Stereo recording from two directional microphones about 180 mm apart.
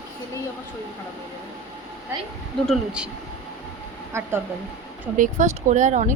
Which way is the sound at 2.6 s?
Centre (ahead or behind).